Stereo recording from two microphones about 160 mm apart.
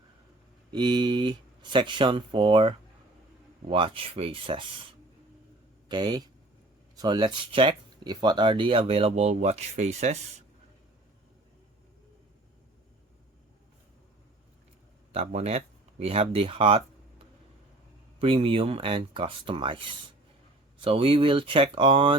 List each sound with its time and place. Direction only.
0.7 s speech: 30° right (ahead or behind)
5.9 s speech: 25° right (ahead or behind); by 10.2 s 45° right (ahead or behind)
15.1 s speech: 40° right (ahead or behind)
18.2 s speech: 35° right (ahead or behind)